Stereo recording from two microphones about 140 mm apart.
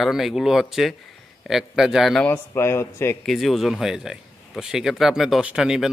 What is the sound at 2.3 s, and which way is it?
Speech, 20° left (ahead or behind).